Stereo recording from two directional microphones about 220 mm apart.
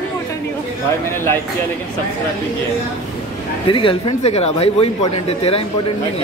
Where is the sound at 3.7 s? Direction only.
25° left (ahead or behind).